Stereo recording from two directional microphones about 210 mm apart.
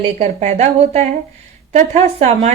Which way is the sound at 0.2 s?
35° right (ahead or behind).